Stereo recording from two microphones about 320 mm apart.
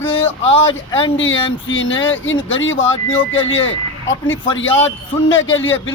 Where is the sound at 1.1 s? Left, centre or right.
Left.